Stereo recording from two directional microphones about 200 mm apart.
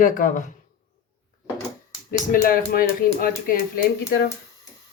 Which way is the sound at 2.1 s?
45° left (ahead or behind).